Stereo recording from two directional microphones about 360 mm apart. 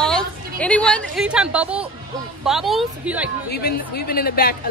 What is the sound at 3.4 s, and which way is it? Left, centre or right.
Speech, left.